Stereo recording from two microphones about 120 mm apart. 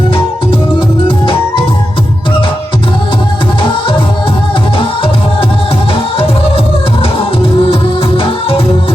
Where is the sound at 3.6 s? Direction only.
45° left (ahead or behind).